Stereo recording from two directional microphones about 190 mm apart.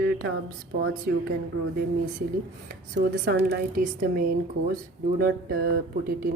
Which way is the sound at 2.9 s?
55° right (ahead or behind).